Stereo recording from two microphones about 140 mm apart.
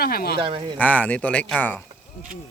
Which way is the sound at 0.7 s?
10° left (ahead or behind).